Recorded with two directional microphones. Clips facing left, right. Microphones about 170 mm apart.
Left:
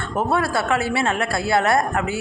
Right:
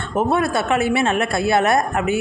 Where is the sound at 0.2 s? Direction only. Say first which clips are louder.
Right 2 dB; 20° right (ahead or behind).